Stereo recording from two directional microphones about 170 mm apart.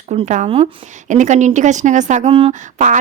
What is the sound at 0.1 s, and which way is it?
A woman's voice, 45° right (ahead or behind).